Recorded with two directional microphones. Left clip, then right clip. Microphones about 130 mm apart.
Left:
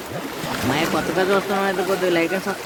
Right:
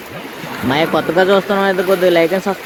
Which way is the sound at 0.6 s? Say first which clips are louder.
Right 7 dB; 25° right (ahead or behind).